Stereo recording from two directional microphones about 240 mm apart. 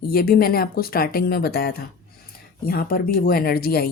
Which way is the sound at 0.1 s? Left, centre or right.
Left.